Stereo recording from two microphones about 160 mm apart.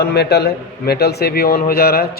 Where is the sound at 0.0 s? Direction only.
90° left.